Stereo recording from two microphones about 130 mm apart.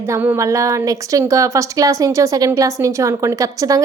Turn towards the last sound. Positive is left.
turn(degrees=-25)  # may be behind; listen again after turning